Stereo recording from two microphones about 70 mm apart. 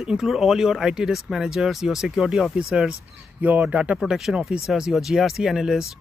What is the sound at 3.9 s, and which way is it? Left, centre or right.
Speech, centre.